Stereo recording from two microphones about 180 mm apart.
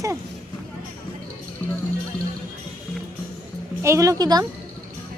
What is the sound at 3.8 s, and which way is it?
Speech, 15° right (ahead or behind).